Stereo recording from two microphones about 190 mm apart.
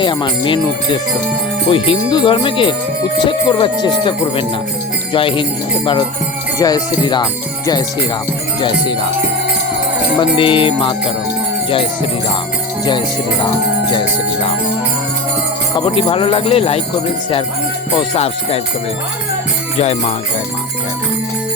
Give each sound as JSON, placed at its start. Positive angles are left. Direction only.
{"t": 0.0, "sound": "speech", "side_deg": 25}
{"t": 10.2, "sound": "speech", "side_deg": 25}
{"t": 16.0, "sound": "speech", "side_deg": 30}
{"t": 17.9, "sound": "speech", "side_deg": 30}
{"t": 19.8, "sound": "speech", "side_deg": 35}